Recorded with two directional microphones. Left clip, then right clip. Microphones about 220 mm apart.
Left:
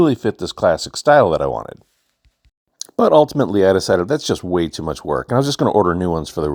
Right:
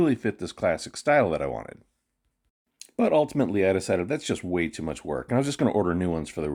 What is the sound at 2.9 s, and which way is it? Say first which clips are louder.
Speech: left 10 dB; 25° left (ahead or behind).